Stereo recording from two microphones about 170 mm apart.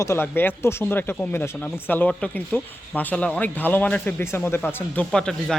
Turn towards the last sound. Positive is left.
turn(degrees=5)  # may be behind; listen again after turning